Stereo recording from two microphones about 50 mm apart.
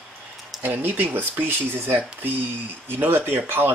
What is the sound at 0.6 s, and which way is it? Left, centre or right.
Speech, right.